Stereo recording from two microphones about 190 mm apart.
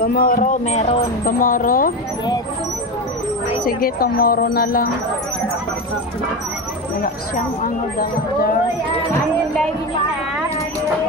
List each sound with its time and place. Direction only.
0.0 s speech: 50° left (ahead or behind)
3.6 s speech: 50° left (ahead or behind)